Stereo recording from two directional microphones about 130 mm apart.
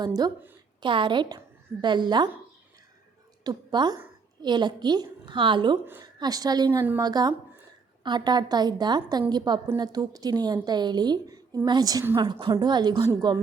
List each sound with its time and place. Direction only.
0.8 s a woman's voice: 40° right (ahead or behind)
3.4 s a woman's voice: 35° right (ahead or behind)
5.8 s a woman's voice: 15° right (ahead or behind)
6.1 s a woman's voice: 30° right (ahead or behind)
7.0 s a woman's voice: 30° right (ahead or behind)